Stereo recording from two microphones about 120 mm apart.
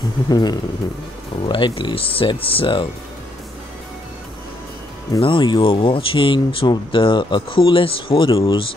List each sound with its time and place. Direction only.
0.3 s music: 35° left (ahead or behind)
1.4 s speech: 45° left (ahead or behind)
5.2 s speech: 40° left (ahead or behind)